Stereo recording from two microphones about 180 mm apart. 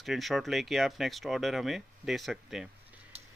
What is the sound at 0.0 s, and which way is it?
Speech, centre (ahead or behind).